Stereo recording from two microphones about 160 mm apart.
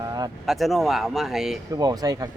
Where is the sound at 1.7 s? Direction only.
25° right (ahead or behind).